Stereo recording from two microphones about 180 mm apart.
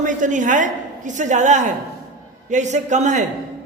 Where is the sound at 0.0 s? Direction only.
45° right (ahead or behind).